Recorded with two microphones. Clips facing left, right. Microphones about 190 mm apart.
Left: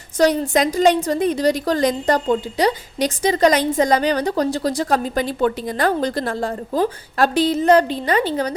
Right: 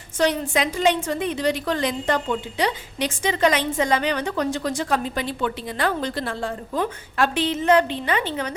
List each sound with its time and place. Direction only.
0.2 s a woman's voice: 40° left (ahead or behind)